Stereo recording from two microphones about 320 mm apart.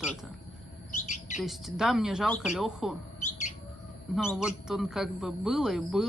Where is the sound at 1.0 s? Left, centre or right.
Left.